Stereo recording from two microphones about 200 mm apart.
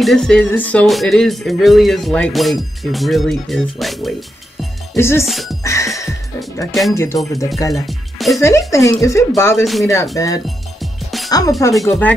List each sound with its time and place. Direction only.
0.0 s speech: centre (ahead or behind)
4.9 s speech: 15° left (ahead or behind)
5.2 s speech: centre (ahead or behind)
5.6 s music: 15° left (ahead or behind)
6.7 s speech: centre (ahead or behind)
7.3 s speech: 15° left (ahead or behind)
7.7 s speech: centre (ahead or behind)
8.4 s speech: 15° left (ahead or behind)
10.8 s music: centre (ahead or behind)
11.2 s speech: 20° left (ahead or behind)
11.7 s speech: centre (ahead or behind)